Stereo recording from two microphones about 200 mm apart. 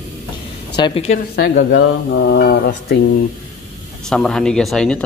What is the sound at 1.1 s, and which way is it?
Speech, 55° left (ahead or behind).